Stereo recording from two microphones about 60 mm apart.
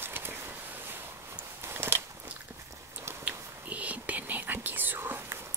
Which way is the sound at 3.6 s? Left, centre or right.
Right.